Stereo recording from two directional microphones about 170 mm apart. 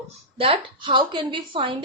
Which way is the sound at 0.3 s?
35° right (ahead or behind).